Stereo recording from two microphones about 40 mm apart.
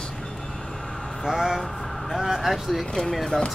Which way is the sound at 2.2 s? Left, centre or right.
Centre.